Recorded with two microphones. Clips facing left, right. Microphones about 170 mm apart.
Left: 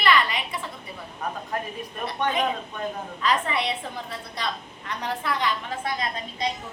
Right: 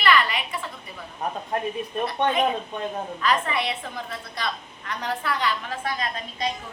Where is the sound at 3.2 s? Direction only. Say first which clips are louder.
Even; 25° left (ahead or behind).